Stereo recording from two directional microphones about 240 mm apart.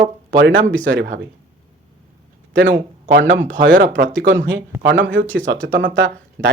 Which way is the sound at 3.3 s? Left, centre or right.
Right.